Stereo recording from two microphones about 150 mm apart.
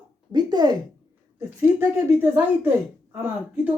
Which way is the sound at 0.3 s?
30° right (ahead or behind).